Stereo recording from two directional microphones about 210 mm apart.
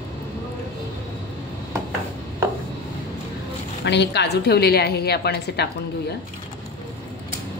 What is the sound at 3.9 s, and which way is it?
A woman's voice, 55° left (ahead or behind).